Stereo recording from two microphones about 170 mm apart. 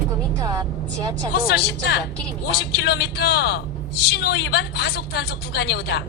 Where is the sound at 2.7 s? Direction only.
75° left (ahead or behind).